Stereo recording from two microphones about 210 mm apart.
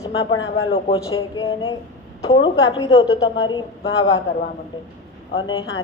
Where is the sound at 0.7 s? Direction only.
25° left (ahead or behind).